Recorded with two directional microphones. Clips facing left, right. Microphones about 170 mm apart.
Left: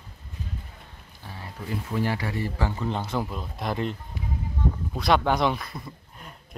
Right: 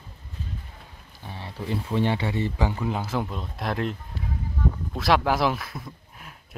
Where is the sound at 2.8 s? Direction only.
5° right (ahead or behind).